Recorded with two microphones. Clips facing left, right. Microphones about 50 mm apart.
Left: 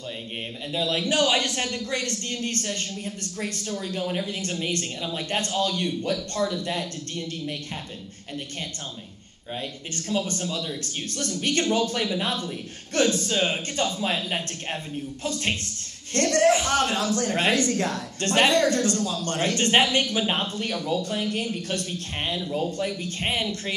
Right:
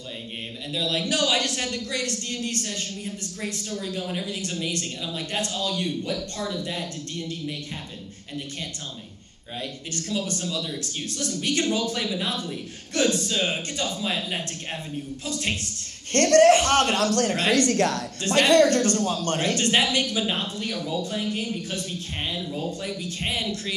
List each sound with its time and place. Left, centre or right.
0.7 s a man's voice: left
9.9 s a man's voice: left
16.1 s a man's voice: right
18.2 s speech: left
18.5 s a man's voice: right
19.0 s a man's voice: right
19.4 s speech: left